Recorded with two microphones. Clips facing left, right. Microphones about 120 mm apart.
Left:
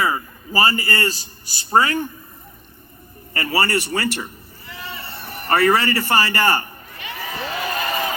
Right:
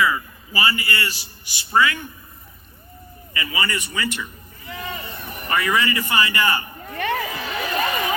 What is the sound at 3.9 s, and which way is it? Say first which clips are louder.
Speech: left 4 dB; 40° left (ahead or behind).